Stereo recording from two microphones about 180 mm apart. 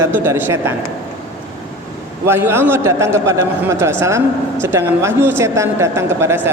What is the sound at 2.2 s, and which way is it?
A man's voice, 15° right (ahead or behind).